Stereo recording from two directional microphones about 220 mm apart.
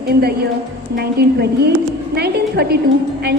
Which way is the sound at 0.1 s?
45° right (ahead or behind).